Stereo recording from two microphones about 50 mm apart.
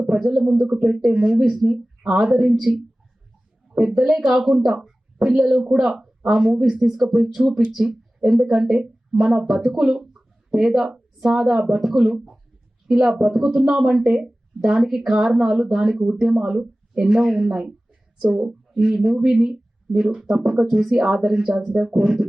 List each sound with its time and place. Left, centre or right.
0.2 s speech: centre
1.1 s speech: centre
1.4 s speech: centre
3.7 s speech: centre